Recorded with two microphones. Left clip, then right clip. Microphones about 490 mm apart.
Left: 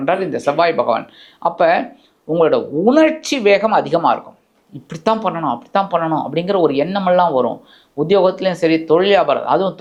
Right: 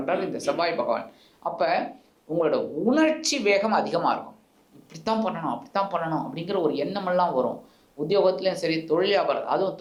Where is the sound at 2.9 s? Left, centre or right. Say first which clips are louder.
Left 6 dB; left.